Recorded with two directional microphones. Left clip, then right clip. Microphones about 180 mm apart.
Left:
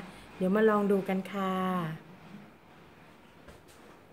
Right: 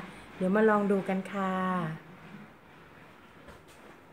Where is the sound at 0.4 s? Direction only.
5° left (ahead or behind).